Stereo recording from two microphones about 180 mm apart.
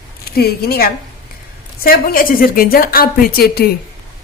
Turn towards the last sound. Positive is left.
turn(degrees=60)  # may be behind; listen again after turning